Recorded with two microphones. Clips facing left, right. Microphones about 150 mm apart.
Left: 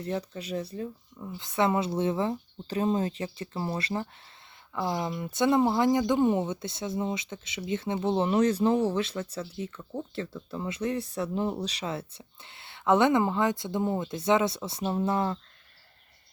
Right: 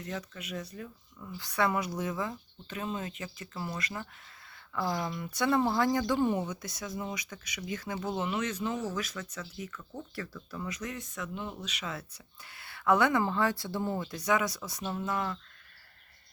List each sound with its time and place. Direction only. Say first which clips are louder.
0.0 s speech: left 7 dB; 30° left (ahead or behind)
4.7 s speech: left 3 dB; 20° left (ahead or behind)